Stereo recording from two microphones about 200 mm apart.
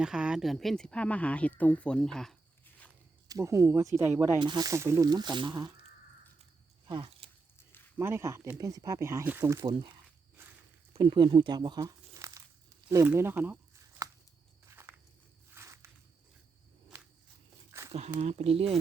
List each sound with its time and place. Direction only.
0.0 s speech: 5° right (ahead or behind)
3.2 s speech: 15° right (ahead or behind)
6.8 s a sound: 25° right (ahead or behind)
7.9 s speech: 10° right (ahead or behind)
9.6 s speech: 25° right (ahead or behind)
10.9 s speech: 25° right (ahead or behind)
12.9 s a sound: 15° right (ahead or behind)
14.7 s walk: 10° right (ahead or behind)
17.7 s a sound: 15° right (ahead or behind)
18.2 s speech: 35° right (ahead or behind)